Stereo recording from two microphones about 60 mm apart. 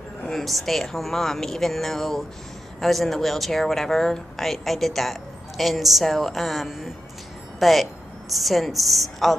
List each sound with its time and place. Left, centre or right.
0.3 s a woman's voice: centre